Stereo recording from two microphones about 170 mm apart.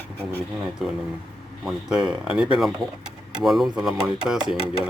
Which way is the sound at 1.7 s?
5° right (ahead or behind).